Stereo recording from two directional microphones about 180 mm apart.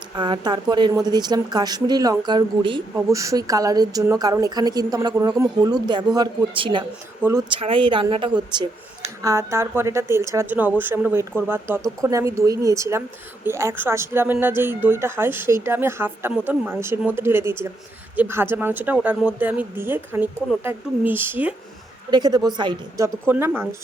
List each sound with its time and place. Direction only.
0.2 s a woman's voice: 25° right (ahead or behind)
7.2 s speech: 15° right (ahead or behind)
7.5 s speech: 30° right (ahead or behind); by 21.5 s 10° right (ahead or behind)
22.1 s a woman's voice: 20° right (ahead or behind)